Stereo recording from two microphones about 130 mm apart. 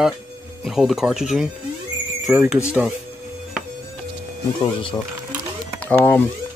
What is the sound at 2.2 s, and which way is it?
Speech, 10° right (ahead or behind).